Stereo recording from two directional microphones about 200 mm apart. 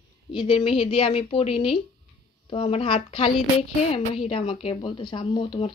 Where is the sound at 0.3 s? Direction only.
25° left (ahead or behind).